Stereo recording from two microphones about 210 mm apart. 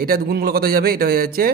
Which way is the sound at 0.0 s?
45° right (ahead or behind).